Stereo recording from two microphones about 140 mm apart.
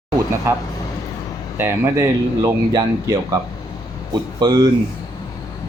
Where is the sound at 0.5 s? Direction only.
20° right (ahead or behind).